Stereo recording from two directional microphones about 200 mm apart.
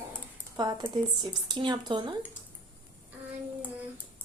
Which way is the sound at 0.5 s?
20° right (ahead or behind).